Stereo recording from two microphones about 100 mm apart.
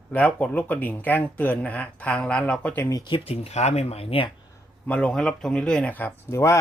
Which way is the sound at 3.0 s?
65° left (ahead or behind).